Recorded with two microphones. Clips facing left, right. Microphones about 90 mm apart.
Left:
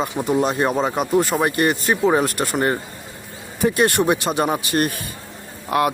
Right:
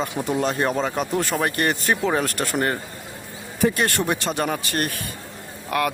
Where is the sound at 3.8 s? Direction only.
20° left (ahead or behind).